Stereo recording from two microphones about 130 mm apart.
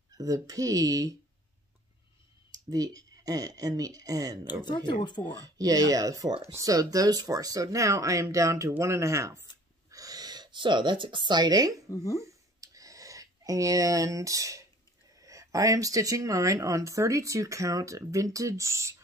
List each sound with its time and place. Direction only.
0.2 s speech: 25° right (ahead or behind)
2.5 s speech: 30° right (ahead or behind)
5.4 s speech: 30° right (ahead or behind)
11.9 s speech: 25° left (ahead or behind)
12.3 s a sound: 25° right (ahead or behind)
15.1 s speech: 25° right (ahead or behind)